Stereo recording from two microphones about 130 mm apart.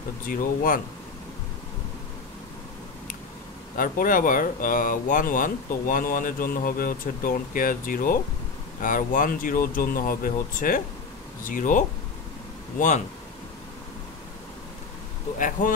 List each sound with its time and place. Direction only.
0.3 s speech: 90° left
3.7 s speech: 90° left
12.7 s speech: 70° left (ahead or behind)
15.3 s speech: 90° left